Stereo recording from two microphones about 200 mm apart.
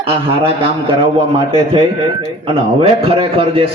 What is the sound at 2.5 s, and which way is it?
A man's voice, 25° right (ahead or behind).